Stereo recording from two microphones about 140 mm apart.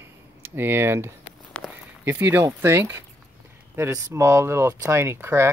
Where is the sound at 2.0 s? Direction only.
15° right (ahead or behind).